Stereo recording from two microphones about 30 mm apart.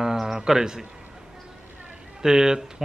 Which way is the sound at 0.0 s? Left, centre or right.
Centre.